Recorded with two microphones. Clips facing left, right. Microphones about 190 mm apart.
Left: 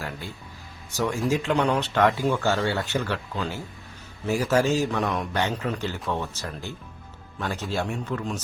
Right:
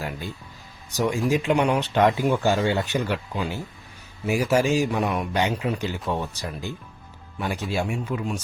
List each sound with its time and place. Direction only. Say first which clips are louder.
0.9 s a man's voice: right 2 dB; 15° right (ahead or behind)